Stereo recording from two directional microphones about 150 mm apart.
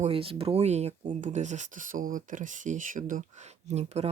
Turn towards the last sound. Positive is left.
turn(degrees=-45)  # may be behind; listen again after turning